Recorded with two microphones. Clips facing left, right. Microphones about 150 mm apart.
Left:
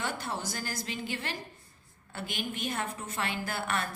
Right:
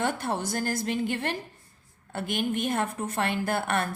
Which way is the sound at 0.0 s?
55° right (ahead or behind).